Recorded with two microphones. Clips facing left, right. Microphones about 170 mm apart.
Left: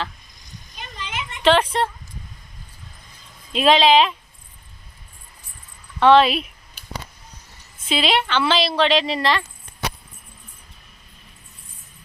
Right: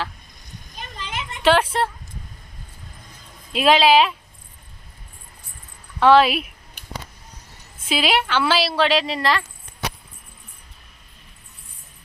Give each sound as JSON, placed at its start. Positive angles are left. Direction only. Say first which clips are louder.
{"t": 0.8, "sound": "children playing", "louder": "even", "side_deg": -40}
{"t": 1.4, "sound": "a sound", "louder": "even", "side_deg": -5}
{"t": 3.5, "sound": "speech", "louder": "even", "side_deg": -5}
{"t": 6.0, "sound": "speech", "louder": "even", "side_deg": -5}
{"t": 7.9, "sound": "speech", "louder": "even", "side_deg": -5}